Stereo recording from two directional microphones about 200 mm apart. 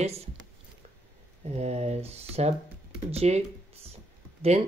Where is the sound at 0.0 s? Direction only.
30° right (ahead or behind).